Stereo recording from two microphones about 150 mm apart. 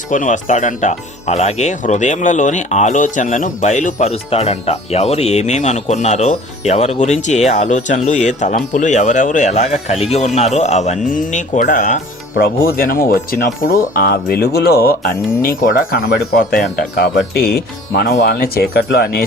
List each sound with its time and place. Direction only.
0.1 s speech: 60° left (ahead or behind)
12.6 s speech: 75° left (ahead or behind)
15.4 s speech: 70° left (ahead or behind)
17.3 s speech: 90° left